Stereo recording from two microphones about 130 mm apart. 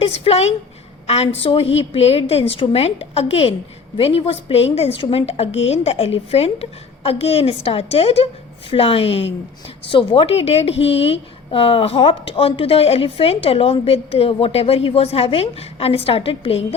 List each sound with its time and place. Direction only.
0.0 s speech: 50° left (ahead or behind)